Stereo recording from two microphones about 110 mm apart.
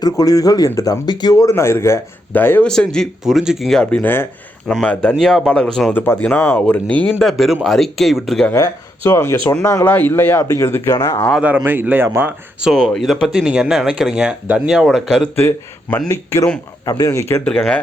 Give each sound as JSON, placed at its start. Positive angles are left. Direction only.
{"t": 0.0, "sound": "a man's voice", "side_deg": 35}
{"t": 2.6, "sound": "speech", "side_deg": 5}
{"t": 3.2, "sound": "speech", "side_deg": -5}
{"t": 4.0, "sound": "a man's voice", "side_deg": 20}
{"t": 4.7, "sound": "speech", "side_deg": 10}
{"t": 5.9, "sound": "speech", "side_deg": 20}
{"t": 7.2, "sound": "speech", "side_deg": 0}
{"t": 8.5, "sound": "a man's voice", "side_deg": 30}
{"t": 10.9, "sound": "a man's voice", "side_deg": 35}
{"t": 11.3, "sound": "speech", "side_deg": -15}
{"t": 12.6, "sound": "speech", "side_deg": 0}
{"t": 14.8, "sound": "speech", "side_deg": 5}
{"t": 15.4, "sound": "a man's voice", "side_deg": 20}